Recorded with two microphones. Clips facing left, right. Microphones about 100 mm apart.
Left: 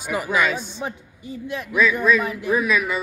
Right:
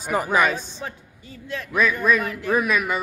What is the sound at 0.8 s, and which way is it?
Speech, 15° left (ahead or behind).